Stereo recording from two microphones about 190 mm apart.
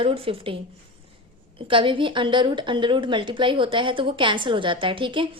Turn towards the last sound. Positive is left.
turn(degrees=-25)  # may be behind; listen again after turning